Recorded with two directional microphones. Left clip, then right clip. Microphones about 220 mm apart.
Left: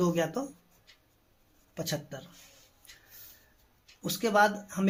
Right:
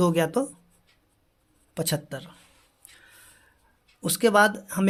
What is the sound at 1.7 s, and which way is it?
Speech, 50° right (ahead or behind).